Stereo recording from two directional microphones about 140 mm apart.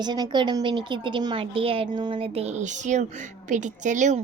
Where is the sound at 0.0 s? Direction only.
30° right (ahead or behind).